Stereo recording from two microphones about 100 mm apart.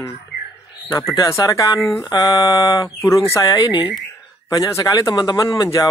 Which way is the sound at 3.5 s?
40° left (ahead or behind).